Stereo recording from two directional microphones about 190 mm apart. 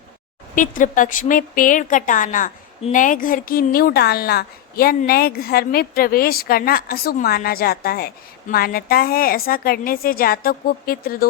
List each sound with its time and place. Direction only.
0.5 s a woman's voice: 45° left (ahead or behind)